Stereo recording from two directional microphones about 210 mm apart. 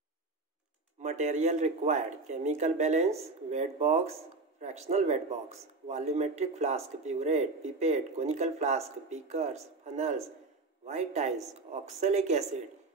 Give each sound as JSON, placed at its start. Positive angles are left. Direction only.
{"t": 1.0, "sound": "speech", "side_deg": -35}